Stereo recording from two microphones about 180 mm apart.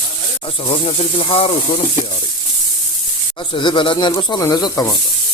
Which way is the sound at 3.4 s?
25° left (ahead or behind).